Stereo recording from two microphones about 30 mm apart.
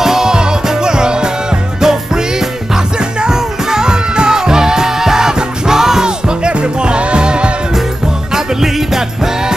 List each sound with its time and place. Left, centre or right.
0.0 s music: centre
6.0 s music: right
8.3 s music: centre